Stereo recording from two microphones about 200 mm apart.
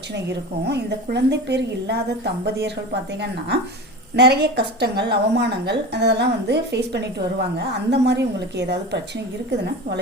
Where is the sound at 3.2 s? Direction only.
55° right (ahead or behind).